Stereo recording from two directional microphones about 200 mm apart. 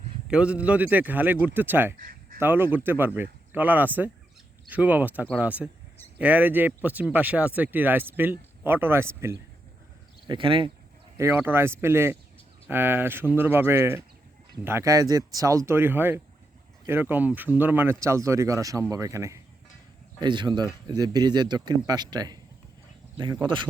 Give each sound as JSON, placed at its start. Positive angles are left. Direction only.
{"t": 0.3, "sound": "speech", "side_deg": -5}
{"t": 2.0, "sound": "a sound", "side_deg": -45}
{"t": 2.4, "sound": "speech", "side_deg": -10}
{"t": 10.2, "sound": "speech", "side_deg": -25}
{"t": 11.2, "sound": "speech", "side_deg": -10}